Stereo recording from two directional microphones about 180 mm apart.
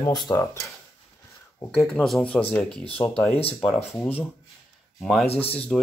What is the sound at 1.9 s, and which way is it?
Speech, centre (ahead or behind).